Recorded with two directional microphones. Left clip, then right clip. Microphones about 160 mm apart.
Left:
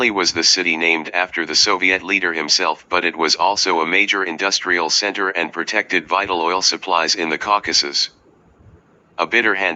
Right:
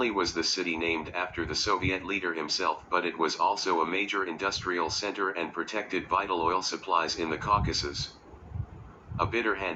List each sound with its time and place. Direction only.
0.0 s speech: 45° left (ahead or behind)
9.1 s speech: 45° left (ahead or behind)